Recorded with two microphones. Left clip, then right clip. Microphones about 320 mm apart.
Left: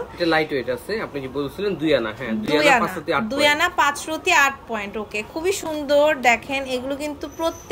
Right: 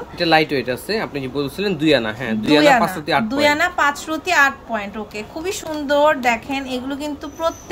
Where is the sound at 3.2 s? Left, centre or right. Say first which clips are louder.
Even; centre.